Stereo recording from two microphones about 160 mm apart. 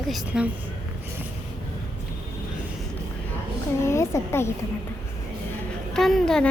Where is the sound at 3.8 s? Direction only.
15° left (ahead or behind).